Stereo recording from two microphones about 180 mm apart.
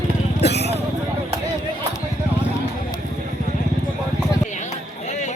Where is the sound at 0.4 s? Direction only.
70° left (ahead or behind).